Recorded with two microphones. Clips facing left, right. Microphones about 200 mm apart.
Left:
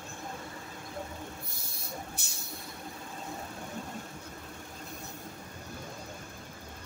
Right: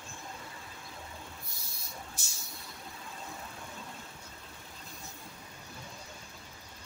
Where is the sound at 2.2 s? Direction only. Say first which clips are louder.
Left 4 dB; 65° left (ahead or behind).